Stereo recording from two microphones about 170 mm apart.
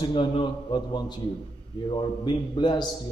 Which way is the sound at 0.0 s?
25° left (ahead or behind).